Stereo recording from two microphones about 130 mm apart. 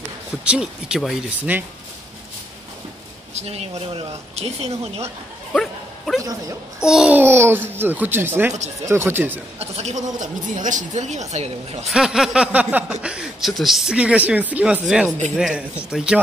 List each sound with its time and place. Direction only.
0.4 s speech: 5° right (ahead or behind)
3.3 s speech: 55° right (ahead or behind)
5.5 s speech: 5° left (ahead or behind); by 9.4 s 15° right (ahead or behind)
9.6 s speech: 60° right (ahead or behind)
11.9 s speech: 5° right (ahead or behind)